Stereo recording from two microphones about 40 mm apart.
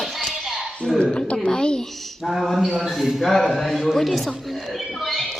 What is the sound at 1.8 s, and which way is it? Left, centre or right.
Mantra, centre.